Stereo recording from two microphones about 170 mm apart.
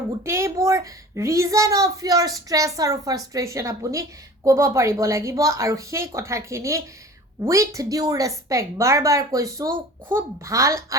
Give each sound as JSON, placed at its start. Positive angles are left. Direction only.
{"t": 0.3, "sound": "a child's voice", "side_deg": -15}